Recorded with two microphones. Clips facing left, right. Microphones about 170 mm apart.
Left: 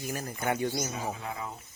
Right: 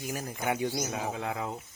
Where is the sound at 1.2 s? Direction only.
75° right (ahead or behind).